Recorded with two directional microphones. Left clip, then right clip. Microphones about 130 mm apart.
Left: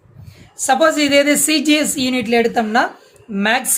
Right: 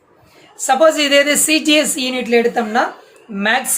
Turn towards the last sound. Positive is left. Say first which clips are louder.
# right 1 dB
turn(degrees=40)  # may be behind; listen again after turning